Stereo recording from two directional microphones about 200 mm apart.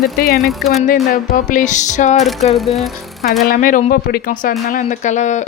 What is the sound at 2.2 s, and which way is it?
Speech, centre (ahead or behind).